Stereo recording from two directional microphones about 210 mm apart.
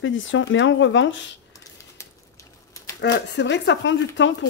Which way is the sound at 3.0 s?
55° left (ahead or behind).